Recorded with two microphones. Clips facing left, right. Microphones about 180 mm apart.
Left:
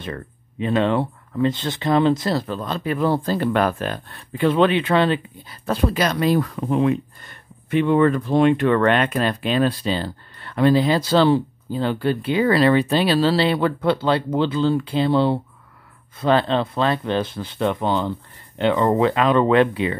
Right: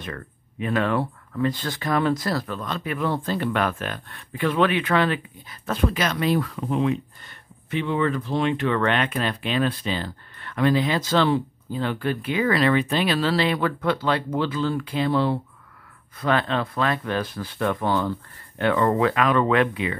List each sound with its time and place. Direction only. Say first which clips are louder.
0.0 s speech: left 4 dB; 25° left (ahead or behind)